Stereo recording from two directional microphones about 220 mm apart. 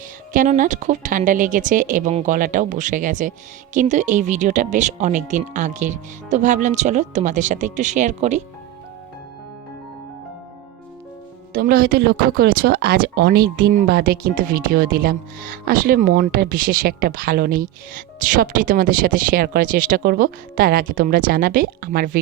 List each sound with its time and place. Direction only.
0.3 s speech: 35° right (ahead or behind)
11.5 s speech: 40° right (ahead or behind)